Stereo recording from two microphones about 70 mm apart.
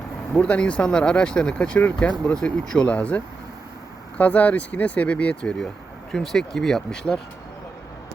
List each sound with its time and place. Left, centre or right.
0.4 s speech: centre
6.1 s speech: centre